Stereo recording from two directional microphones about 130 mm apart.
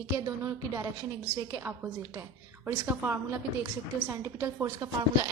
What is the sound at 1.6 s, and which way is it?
A woman's voice, 15° right (ahead or behind).